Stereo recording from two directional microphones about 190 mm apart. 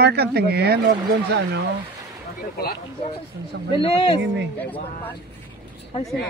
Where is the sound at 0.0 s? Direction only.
60° right (ahead or behind).